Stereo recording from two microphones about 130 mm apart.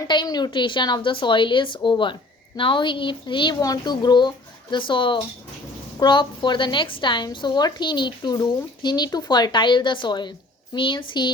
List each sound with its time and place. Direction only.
0.1 s a woman's voice: 35° left (ahead or behind)